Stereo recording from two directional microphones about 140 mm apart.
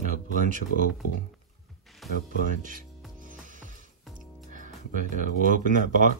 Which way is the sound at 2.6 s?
70° right (ahead or behind).